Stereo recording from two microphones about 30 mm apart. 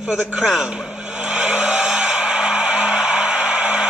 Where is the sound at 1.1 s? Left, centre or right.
Right.